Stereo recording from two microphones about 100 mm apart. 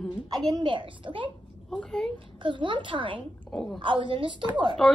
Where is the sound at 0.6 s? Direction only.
55° right (ahead or behind).